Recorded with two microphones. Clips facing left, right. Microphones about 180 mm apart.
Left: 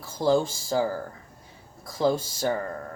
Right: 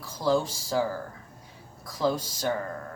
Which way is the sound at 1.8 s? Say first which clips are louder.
Left 3 dB; 25° left (ahead or behind).